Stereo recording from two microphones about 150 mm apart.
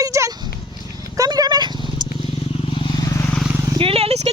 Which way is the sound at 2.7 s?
35° left (ahead or behind).